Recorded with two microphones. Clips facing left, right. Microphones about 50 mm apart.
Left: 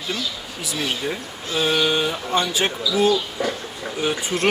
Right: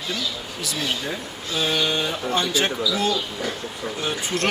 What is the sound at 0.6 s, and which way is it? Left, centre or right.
Speech, centre.